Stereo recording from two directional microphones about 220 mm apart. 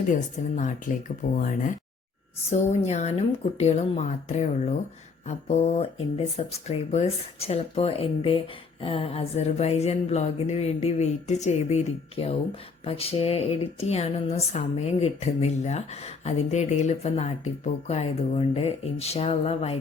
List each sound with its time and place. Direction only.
0.1 s speech: 35° left (ahead or behind)